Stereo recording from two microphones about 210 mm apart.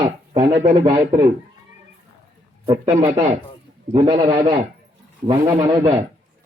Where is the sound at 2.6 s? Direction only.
30° right (ahead or behind).